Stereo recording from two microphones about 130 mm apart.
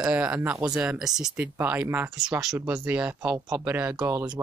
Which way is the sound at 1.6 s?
15° right (ahead or behind).